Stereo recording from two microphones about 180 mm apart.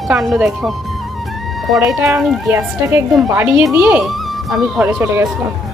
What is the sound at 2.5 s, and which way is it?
A woman's voice, 15° right (ahead or behind).